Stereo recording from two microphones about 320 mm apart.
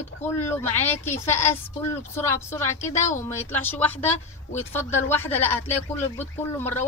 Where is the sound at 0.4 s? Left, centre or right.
Centre.